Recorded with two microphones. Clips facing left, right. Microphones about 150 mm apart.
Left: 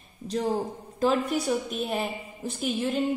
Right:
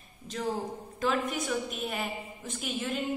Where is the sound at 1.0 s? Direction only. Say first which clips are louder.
Left 5 dB; 35° left (ahead or behind).